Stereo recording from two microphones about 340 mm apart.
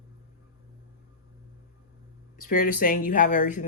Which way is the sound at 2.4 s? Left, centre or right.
Left.